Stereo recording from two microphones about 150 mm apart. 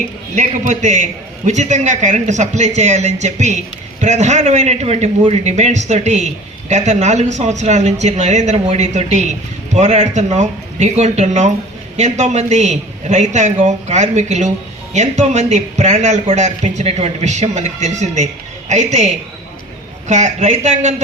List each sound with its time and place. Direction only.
0.3 s a man's voice: 55° right (ahead or behind)